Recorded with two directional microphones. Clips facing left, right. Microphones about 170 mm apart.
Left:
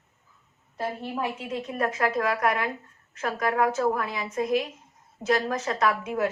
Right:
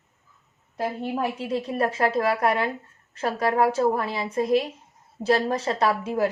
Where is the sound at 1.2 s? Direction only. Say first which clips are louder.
Right 4 dB; 35° right (ahead or behind).